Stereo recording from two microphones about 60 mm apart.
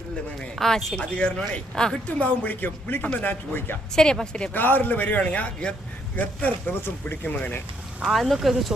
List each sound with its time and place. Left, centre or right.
0.6 s speech: centre
1.1 s speech: centre
2.0 s speech: left
3.9 s speech: centre
4.5 s speech: left
6.1 s speech: left
8.0 s speech: centre